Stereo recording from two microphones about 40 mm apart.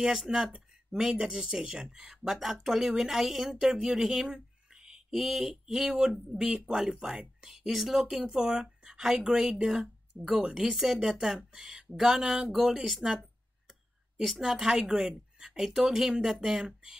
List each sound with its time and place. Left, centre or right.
0.3 s speech: centre
2.3 s speech: centre
3.7 s a sound: centre
5.1 s speech: centre
7.5 s speech: centre; by 10.7 s right
10.7 s speech: centre
11.9 s speech: centre
12.2 s speech: centre
14.2 s speech: centre
14.7 s speech: centre